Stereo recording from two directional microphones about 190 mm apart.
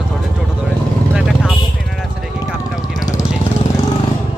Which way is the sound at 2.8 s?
20° left (ahead or behind).